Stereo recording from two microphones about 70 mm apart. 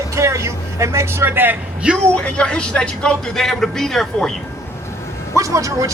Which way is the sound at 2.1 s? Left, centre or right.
Centre.